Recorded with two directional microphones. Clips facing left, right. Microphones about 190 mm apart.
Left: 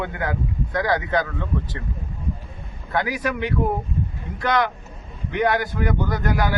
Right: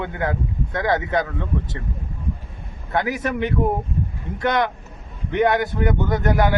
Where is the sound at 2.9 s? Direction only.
20° right (ahead or behind).